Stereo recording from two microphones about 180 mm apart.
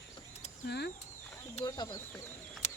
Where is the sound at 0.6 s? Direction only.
65° left (ahead or behind).